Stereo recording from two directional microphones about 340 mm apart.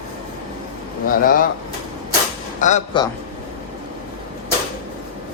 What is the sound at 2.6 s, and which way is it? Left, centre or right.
Speech, centre.